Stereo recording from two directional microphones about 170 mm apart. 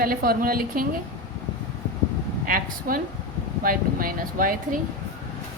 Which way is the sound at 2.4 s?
55° right (ahead or behind).